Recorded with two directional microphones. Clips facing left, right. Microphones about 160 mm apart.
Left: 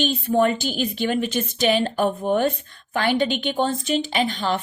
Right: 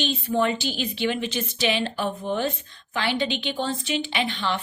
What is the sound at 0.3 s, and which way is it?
A woman's voice, 50° left (ahead or behind).